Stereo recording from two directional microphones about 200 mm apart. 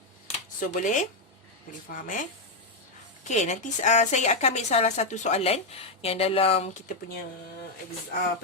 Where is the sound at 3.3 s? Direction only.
35° left (ahead or behind).